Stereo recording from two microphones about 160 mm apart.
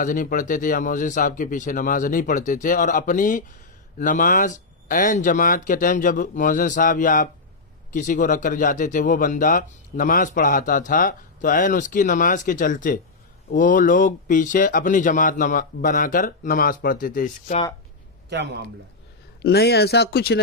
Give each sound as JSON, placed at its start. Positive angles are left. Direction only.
{"t": 0.0, "sound": "speech", "side_deg": 55}
{"t": 19.4, "sound": "speech", "side_deg": 90}